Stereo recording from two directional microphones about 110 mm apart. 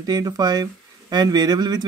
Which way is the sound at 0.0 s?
35° right (ahead or behind).